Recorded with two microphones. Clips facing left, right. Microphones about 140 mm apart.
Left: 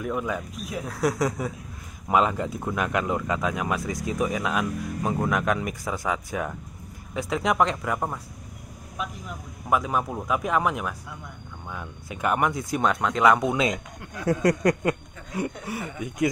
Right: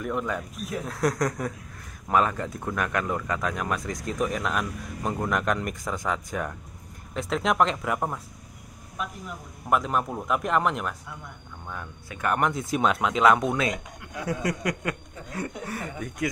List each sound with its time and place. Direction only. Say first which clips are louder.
0.0 s speech: left 1 dB; 5° left (ahead or behind)
9.7 s speech: even; centre (ahead or behind)
12.1 s speech: left 2 dB; 15° left (ahead or behind)
12.4 s speech: even; centre (ahead or behind)
14.2 s a sound: left 7 dB; 45° left (ahead or behind)
14.8 s speech: left 6 dB; 20° left (ahead or behind)